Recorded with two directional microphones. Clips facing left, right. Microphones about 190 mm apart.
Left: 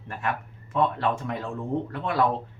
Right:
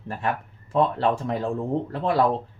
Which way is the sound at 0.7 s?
30° right (ahead or behind).